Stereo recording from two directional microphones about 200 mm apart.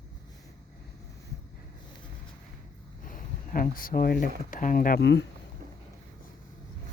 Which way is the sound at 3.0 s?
45° left (ahead or behind).